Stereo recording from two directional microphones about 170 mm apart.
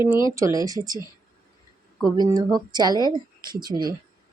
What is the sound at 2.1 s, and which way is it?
Speech, 25° right (ahead or behind).